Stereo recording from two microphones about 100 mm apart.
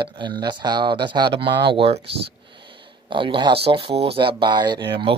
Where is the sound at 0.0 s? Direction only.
50° right (ahead or behind); by 2.0 s 70° right (ahead or behind).